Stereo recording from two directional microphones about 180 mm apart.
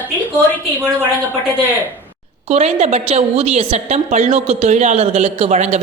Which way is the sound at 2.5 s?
35° right (ahead or behind).